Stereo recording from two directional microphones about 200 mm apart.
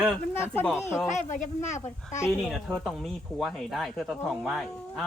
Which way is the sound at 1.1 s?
35° left (ahead or behind).